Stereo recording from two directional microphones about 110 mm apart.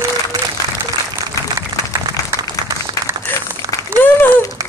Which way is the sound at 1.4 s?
30° left (ahead or behind).